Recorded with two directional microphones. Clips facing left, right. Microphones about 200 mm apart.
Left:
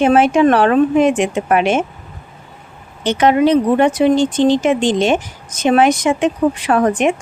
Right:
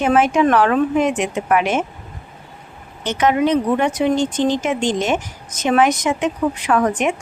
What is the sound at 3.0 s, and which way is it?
Speech, 30° left (ahead or behind).